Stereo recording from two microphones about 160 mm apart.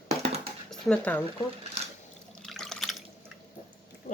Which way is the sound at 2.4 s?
Centre (ahead or behind).